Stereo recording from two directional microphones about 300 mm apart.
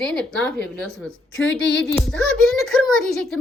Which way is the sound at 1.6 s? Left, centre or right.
Left.